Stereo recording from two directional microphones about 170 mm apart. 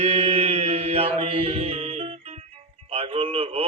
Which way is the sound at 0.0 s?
35° right (ahead or behind).